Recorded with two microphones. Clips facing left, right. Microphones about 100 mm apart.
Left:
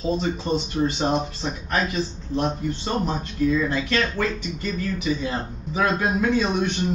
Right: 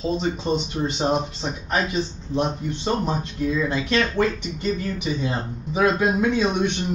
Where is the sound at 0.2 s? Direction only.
20° right (ahead or behind).